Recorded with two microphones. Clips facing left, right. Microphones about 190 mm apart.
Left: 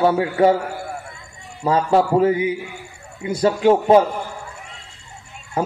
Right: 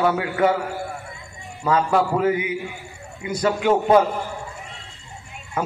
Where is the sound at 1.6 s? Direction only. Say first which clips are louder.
Left 3 dB; 25° left (ahead or behind).